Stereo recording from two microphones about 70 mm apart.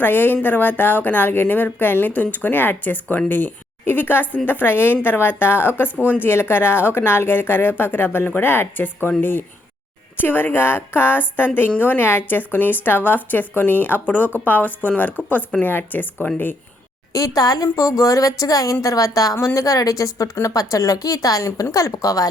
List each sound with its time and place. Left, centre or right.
0.0 s a woman's voice: left
17.1 s a woman's voice: left